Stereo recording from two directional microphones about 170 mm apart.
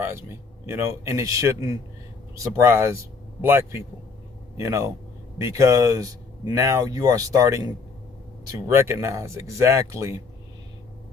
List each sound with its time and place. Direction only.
0.0 s speech: 15° right (ahead or behind)